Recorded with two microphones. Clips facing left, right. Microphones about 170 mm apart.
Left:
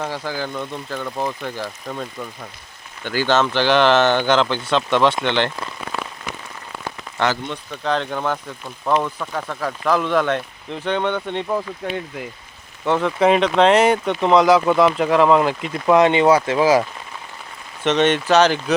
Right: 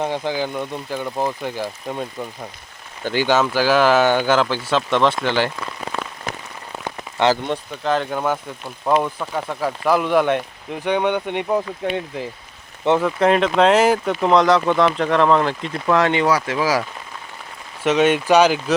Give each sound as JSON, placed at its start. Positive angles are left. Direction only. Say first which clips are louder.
{"t": 0.0, "sound": "speech", "louder": "right 4 dB", "side_deg": -20}
{"t": 6.8, "sound": "rain on surface", "louder": "right 4 dB", "side_deg": -20}
{"t": 7.9, "sound": "speech", "louder": "right 1 dB", "side_deg": -5}
{"t": 13.0, "sound": "speech", "louder": "left 4 dB", "side_deg": 0}
{"t": 17.8, "sound": "speech", "louder": "right 1 dB", "side_deg": -10}